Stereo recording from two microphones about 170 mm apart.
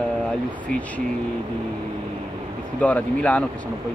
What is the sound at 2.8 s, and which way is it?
Speech, 10° left (ahead or behind).